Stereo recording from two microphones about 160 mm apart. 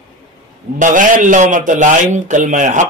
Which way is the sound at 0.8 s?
55° right (ahead or behind).